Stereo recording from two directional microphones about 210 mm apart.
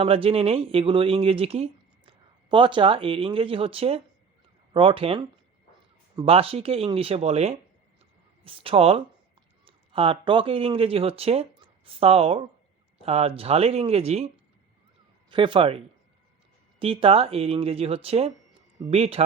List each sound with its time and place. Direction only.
0.0 s speech: 25° right (ahead or behind)
15.3 s speech: 25° right (ahead or behind)
16.8 s speech: 25° right (ahead or behind)